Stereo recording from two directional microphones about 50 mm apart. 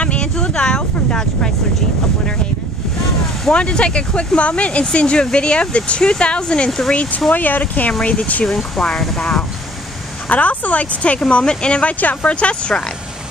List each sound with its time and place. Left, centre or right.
0.0 s a sound: left
0.4 s a sound: centre
3.4 s speech: centre
7.3 s speech: left
8.5 s speech: centre
10.2 s speech: left